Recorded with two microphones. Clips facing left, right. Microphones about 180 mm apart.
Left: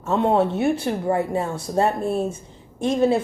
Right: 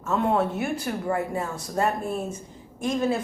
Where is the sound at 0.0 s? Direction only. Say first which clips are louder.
Left 4 dB; 25° left (ahead or behind).